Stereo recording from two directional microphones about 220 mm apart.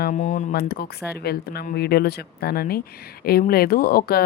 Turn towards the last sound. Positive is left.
turn(degrees=45)  # may be behind; listen again after turning